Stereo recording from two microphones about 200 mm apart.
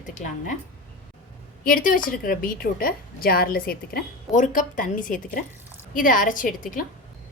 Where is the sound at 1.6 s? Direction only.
45° left (ahead or behind).